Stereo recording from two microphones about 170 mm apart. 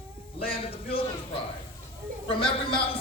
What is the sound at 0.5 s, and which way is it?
Speech, 35° left (ahead or behind).